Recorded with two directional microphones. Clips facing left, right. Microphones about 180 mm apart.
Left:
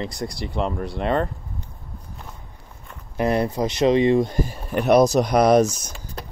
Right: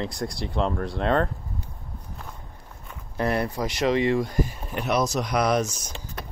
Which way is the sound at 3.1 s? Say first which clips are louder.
Left 4 dB; 20° left (ahead or behind).